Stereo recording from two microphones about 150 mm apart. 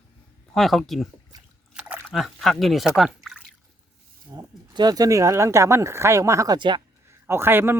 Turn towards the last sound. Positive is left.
turn(degrees=-15)  # may be behind; listen again after turning